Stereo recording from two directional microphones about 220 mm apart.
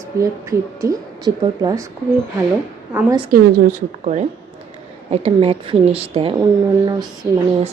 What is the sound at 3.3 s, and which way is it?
A woman's voice, 35° right (ahead or behind).